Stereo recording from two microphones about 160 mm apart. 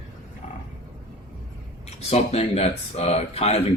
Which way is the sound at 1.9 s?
40° left (ahead or behind).